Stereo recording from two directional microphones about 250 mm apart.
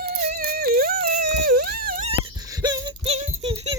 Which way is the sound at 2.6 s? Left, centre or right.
Centre.